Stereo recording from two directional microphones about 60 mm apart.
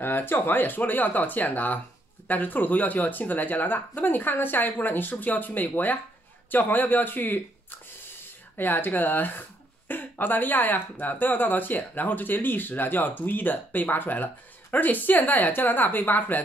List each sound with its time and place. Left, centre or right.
0.0 s speech: left